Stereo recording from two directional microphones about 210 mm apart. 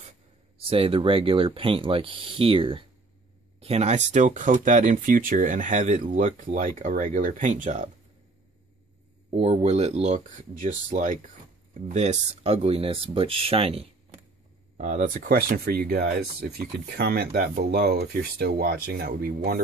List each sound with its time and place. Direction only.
0.6 s speech: 25° right (ahead or behind)
9.3 s speech: 30° right (ahead or behind); by 19.6 s 45° right (ahead or behind)